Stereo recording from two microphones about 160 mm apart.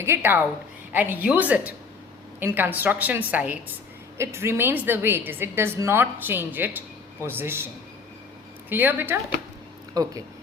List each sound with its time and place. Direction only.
0.0 s a woman's voice: 15° right (ahead or behind)
8.7 s a woman's voice: 10° right (ahead or behind)